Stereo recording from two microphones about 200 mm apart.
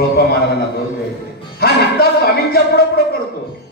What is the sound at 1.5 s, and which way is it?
A man's voice, 50° left (ahead or behind).